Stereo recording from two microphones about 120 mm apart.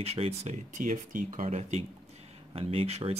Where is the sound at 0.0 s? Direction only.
60° right (ahead or behind).